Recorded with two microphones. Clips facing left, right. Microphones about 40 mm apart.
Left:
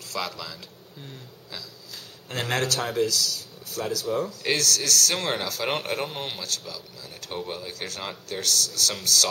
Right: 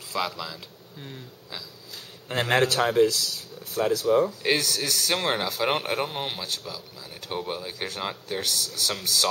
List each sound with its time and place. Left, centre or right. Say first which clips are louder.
0.3 s speech: right 2 dB; centre